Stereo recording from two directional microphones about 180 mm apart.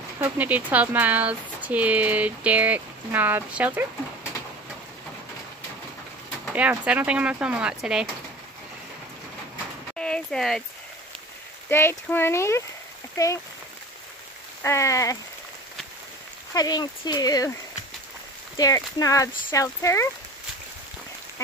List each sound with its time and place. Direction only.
0.2 s speech: 10° right (ahead or behind)
6.5 s speech: 10° right (ahead or behind)
9.9 s a sound: 5° left (ahead or behind)
11.7 s speech: 15° left (ahead or behind)
14.6 s speech: 15° left (ahead or behind)
16.5 s speech: 20° left (ahead or behind)
18.6 s speech: 20° left (ahead or behind)